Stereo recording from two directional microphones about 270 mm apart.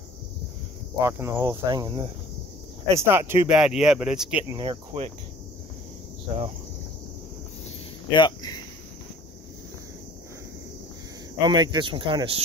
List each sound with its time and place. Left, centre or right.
0.9 s speech: centre
4.6 s speech: centre
8.1 s speech: centre
11.4 s speech: centre